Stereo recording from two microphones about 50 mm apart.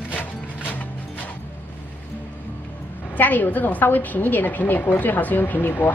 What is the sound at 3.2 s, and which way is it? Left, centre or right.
A woman's voice, left.